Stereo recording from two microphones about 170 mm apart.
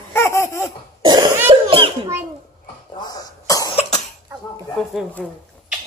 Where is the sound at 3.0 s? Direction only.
20° left (ahead or behind).